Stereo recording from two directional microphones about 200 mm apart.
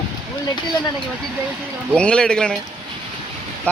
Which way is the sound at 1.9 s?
5° left (ahead or behind).